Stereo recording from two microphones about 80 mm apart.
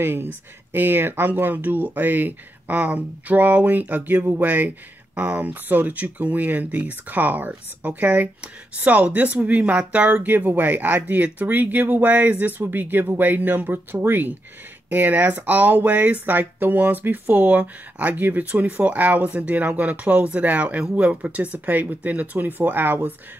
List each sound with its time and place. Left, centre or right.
0.0 s speech: right